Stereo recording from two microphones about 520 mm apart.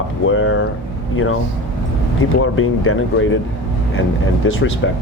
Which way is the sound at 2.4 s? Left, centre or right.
Left.